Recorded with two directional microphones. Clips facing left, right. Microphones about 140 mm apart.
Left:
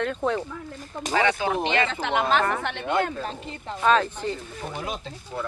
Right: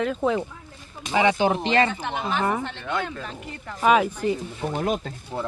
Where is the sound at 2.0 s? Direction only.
90° left.